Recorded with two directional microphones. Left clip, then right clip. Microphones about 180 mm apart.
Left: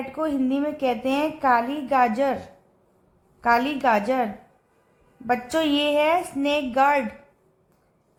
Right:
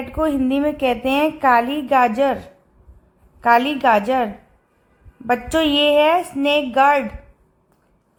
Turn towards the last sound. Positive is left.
turn(degrees=-25)  # may be behind; listen again after turning